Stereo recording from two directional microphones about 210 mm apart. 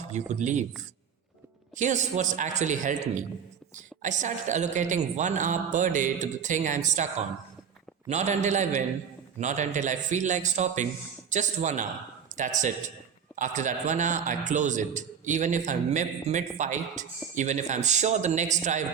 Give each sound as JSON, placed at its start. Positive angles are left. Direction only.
{"t": 0.1, "sound": "a man's voice", "side_deg": -35}
{"t": 1.7, "sound": "a man's voice", "side_deg": -35}